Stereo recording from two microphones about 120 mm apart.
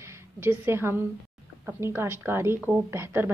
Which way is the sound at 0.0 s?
20° right (ahead or behind).